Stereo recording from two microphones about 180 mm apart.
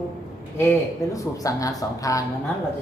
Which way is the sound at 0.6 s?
15° left (ahead or behind).